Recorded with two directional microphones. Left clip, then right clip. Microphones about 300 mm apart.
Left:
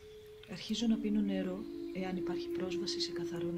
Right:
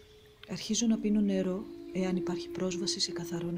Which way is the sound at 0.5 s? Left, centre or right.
Right.